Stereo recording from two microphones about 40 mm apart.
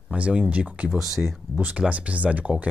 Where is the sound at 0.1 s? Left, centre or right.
Right.